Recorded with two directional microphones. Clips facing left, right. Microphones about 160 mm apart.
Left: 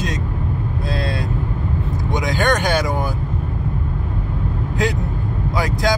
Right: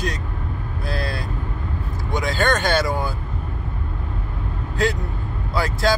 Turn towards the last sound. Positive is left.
turn(degrees=15)  # may be behind; listen again after turning